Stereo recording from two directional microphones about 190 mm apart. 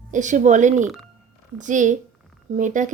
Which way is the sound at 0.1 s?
40° right (ahead or behind).